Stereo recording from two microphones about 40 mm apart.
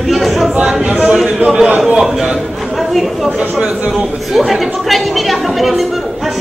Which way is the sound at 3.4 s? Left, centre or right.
Right.